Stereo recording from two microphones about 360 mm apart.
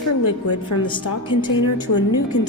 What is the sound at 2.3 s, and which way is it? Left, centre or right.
Speech, left.